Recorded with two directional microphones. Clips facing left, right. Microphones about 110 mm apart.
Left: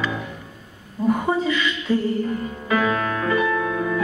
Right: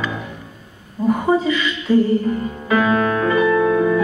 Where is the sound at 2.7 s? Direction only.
30° right (ahead or behind).